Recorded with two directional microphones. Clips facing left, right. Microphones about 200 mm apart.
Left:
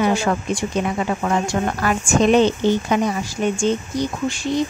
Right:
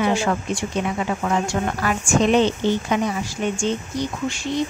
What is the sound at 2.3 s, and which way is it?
Speech, 45° left (ahead or behind).